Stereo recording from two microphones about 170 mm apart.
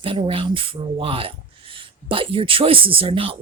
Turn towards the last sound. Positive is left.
turn(degrees=-30)  # may be behind; listen again after turning